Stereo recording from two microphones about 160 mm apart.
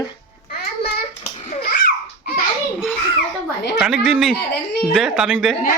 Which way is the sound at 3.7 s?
Centre (ahead or behind).